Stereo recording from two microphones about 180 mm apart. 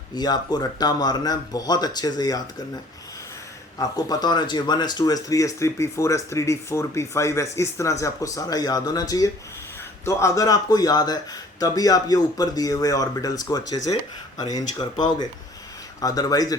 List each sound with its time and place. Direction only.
0.1 s speech: 20° left (ahead or behind)
3.8 s speech: 20° left (ahead or behind)
16.0 s speech: 20° left (ahead or behind)